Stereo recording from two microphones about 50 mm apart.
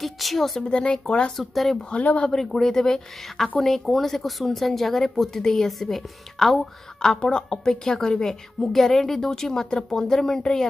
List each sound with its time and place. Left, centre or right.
0.0 s a woman's voice: centre
0.6 s speech: centre
1.4 s a woman's voice: centre
1.9 s speech: left
2.3 s a woman's voice: centre
7.0 s a woman's voice: centre